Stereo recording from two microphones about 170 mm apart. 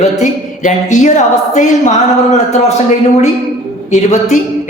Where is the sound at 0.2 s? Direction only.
45° left (ahead or behind).